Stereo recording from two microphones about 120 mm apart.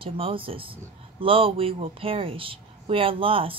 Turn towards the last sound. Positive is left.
turn(degrees=-50)  # may be behind; listen again after turning